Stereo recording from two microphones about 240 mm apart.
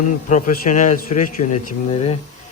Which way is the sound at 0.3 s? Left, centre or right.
Left.